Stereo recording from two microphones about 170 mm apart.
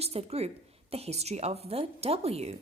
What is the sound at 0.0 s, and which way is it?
A woman's voice, 40° right (ahead or behind).